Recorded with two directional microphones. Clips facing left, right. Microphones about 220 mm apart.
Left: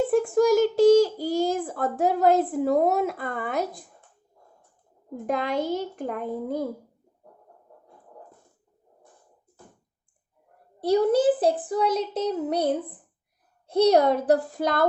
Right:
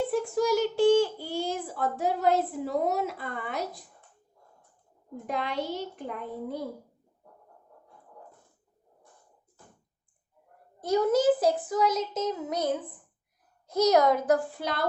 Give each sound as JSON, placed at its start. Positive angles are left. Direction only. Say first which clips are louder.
{"t": 0.1, "sound": "a child's voice", "louder": "left 6 dB", "side_deg": 50}
{"t": 5.2, "sound": "a child's voice", "louder": "left 5 dB", "side_deg": 45}
{"t": 10.8, "sound": "child singing", "louder": "left 4 dB", "side_deg": 35}